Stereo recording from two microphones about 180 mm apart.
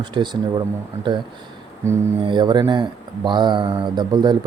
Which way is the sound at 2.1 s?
25° right (ahead or behind).